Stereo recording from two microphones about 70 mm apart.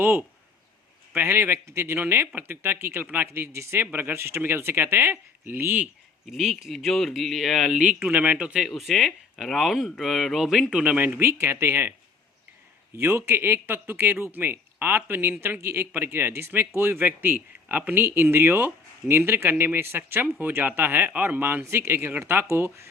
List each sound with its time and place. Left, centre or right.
0.0 s speech: right
6.3 s speech: centre
7.9 s speech: right
8.6 s speech: centre
10.9 s speech: right
13.0 s speech: right